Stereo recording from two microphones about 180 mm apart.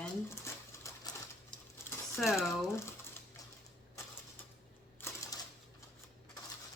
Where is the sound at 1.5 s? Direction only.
15° left (ahead or behind).